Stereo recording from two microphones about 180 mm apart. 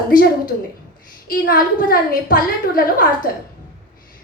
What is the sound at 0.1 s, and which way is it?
A woman's voice, 50° left (ahead or behind).